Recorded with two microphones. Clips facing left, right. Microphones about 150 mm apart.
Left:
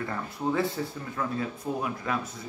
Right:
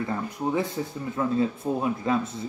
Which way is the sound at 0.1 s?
20° right (ahead or behind).